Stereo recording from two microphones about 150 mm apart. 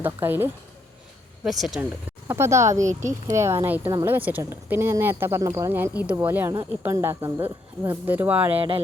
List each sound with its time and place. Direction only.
0.0 s speech: 15° right (ahead or behind)
1.5 s speech: centre (ahead or behind)
8.5 s speech: 40° right (ahead or behind)